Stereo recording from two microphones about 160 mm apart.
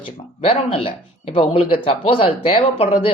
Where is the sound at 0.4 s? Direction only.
35° left (ahead or behind).